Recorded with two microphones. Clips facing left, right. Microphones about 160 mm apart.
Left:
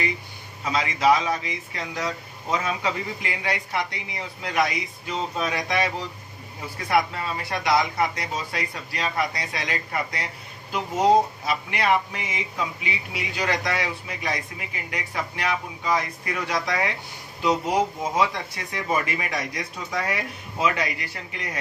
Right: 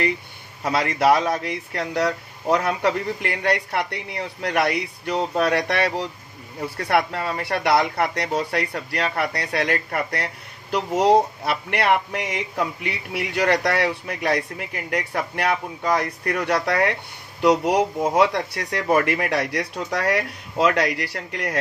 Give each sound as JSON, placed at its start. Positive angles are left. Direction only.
{"t": 0.7, "sound": "speech", "side_deg": -60}